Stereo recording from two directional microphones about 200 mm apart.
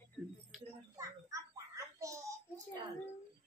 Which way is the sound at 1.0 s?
15° right (ahead or behind).